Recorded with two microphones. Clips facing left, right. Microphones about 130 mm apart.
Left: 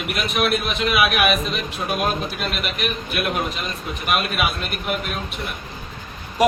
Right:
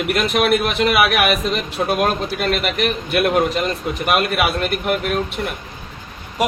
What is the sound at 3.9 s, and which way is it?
A man's voice, 80° right.